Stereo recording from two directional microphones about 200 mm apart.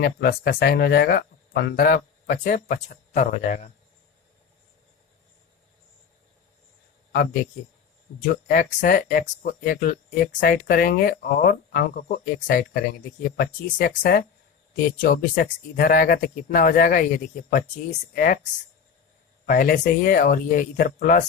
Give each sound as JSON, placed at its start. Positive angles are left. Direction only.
{"t": 0.0, "sound": "a man's voice", "side_deg": 50}
{"t": 8.2, "sound": "speech", "side_deg": 40}
{"t": 19.5, "sound": "speech", "side_deg": 45}